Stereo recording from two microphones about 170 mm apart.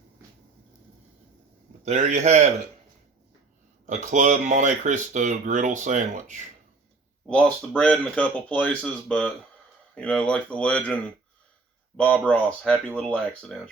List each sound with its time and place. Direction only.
1.8 s speech: 45° right (ahead or behind)
3.8 s speech: 50° right (ahead or behind)
7.3 s speech: 5° left (ahead or behind)